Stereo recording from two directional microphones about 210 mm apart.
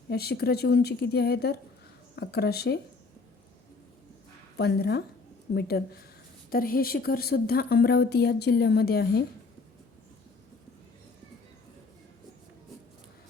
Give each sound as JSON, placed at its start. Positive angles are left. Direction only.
{"t": 0.1, "sound": "speech", "side_deg": 50}
{"t": 4.5, "sound": "speech", "side_deg": 50}